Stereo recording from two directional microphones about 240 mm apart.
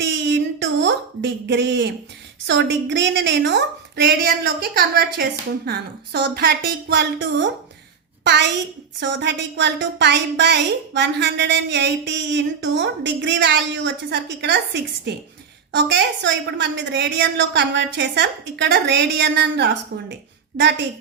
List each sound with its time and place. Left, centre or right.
0.0 s a sound: right
2.9 s a woman's voice: right
20.5 s a woman's voice: right